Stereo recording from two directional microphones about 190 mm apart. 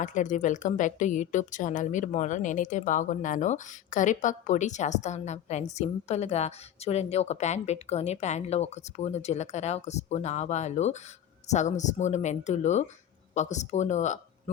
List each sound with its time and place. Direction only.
0.0 s a woman's voice: 40° left (ahead or behind)